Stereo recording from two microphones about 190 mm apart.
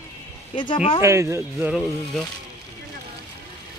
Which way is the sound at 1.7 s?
Centre (ahead or behind).